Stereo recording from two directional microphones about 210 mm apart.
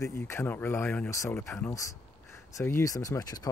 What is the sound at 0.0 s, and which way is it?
Speech, 10° left (ahead or behind).